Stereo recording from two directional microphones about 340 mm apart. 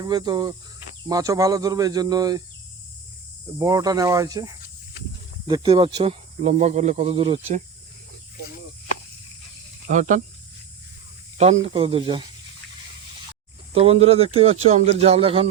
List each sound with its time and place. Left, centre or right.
0.0 s speech: centre
3.6 s speech: centre
5.5 s speech: centre
9.9 s speech: right
11.3 s speech: centre
13.7 s speech: centre